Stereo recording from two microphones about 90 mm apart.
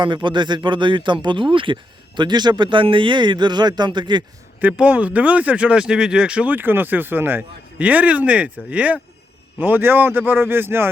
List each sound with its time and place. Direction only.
0.0 s speech: 60° right (ahead or behind)
4.6 s a man's voice: 15° right (ahead or behind)